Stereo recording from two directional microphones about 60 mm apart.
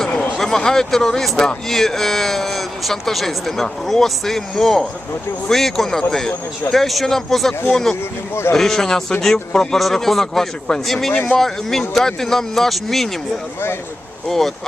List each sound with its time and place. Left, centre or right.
0.1 s a sound: left
0.3 s speech: centre
11.1 s speech: left
11.3 s speech: centre
14.3 s speech: centre